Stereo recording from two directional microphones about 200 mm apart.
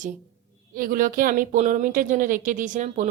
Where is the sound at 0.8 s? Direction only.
45° right (ahead or behind).